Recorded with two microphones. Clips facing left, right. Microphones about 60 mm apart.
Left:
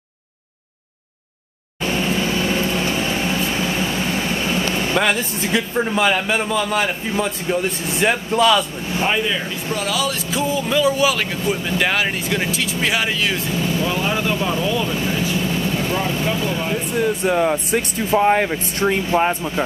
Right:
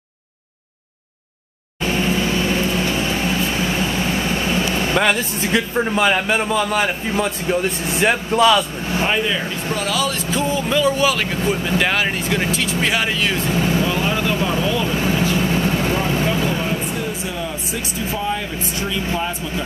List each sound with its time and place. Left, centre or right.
2.0 s vehicle: centre
2.9 s a sound: centre
4.3 s a sound: centre
5.0 s a man's voice: centre
13.6 s speech: right
14.0 s a man's voice: centre
15.0 s vehicle: right
15.9 s speech: right
16.9 s speech: left